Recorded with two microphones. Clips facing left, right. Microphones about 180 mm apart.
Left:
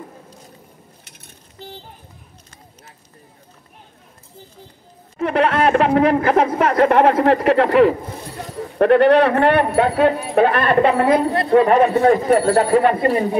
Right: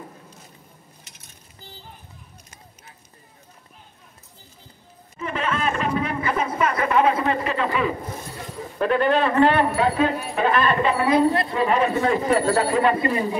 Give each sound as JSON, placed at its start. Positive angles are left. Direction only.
{"t": 1.0, "sound": "a sound", "side_deg": 60}
{"t": 5.1, "sound": "speech", "side_deg": 75}
{"t": 8.7, "sound": "speech", "side_deg": 65}